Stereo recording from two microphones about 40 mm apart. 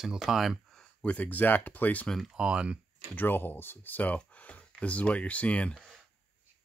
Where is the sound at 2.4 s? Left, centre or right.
Right.